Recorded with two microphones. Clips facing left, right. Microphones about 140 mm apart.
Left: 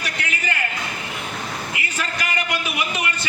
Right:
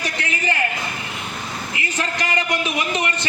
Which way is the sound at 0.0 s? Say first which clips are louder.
Right 3 dB; 35° right (ahead or behind).